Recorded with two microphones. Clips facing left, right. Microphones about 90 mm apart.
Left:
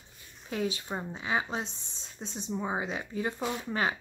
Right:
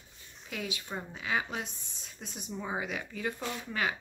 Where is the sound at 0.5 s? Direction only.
35° left (ahead or behind).